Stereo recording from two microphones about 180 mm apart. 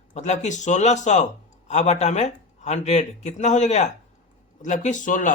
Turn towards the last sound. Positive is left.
turn(degrees=45)  # may be behind; listen again after turning